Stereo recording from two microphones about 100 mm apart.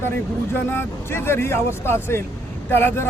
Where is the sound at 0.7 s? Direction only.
25° left (ahead or behind).